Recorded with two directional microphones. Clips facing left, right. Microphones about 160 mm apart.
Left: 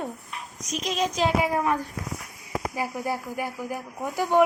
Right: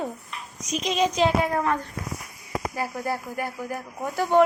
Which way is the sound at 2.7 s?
20° left (ahead or behind).